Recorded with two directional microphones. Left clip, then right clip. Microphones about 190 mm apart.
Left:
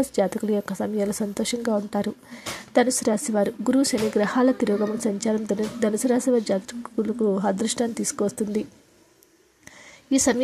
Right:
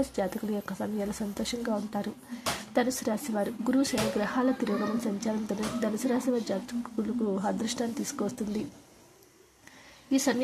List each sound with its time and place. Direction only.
0.1 s a woman's voice: 25° left (ahead or behind)
10.0 s a woman's voice: 25° left (ahead or behind)